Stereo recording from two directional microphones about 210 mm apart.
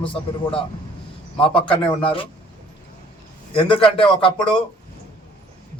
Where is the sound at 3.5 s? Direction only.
25° left (ahead or behind).